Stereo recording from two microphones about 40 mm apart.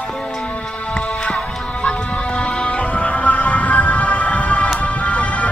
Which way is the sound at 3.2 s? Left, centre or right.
Left.